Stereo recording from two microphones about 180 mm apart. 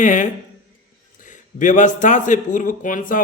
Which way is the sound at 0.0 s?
45° left (ahead or behind).